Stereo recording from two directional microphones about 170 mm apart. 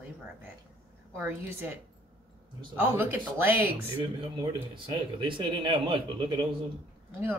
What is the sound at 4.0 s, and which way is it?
Speech, 25° right (ahead or behind).